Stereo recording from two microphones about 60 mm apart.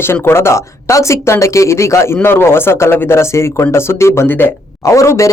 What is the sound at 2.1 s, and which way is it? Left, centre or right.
Speech, left.